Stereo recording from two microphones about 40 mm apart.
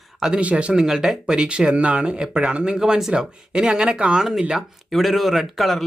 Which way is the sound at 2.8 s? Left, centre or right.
Centre.